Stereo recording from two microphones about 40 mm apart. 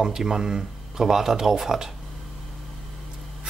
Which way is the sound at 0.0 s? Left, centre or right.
Centre.